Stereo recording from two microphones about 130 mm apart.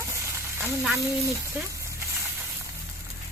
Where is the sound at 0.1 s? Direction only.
15° right (ahead or behind).